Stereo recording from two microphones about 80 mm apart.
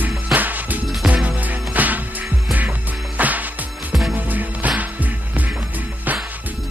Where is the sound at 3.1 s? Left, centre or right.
Centre.